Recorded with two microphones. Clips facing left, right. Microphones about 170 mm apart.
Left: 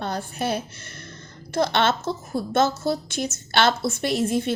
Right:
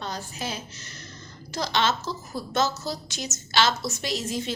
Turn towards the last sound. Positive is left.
turn(degrees=55)  # may be behind; listen again after turning